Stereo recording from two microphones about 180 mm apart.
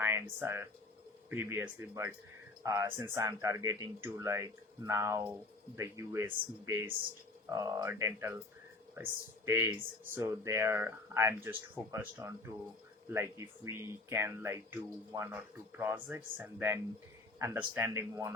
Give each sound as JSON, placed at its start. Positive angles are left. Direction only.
{"t": 0.0, "sound": "speech", "side_deg": -15}
{"t": 9.5, "sound": "speech", "side_deg": -15}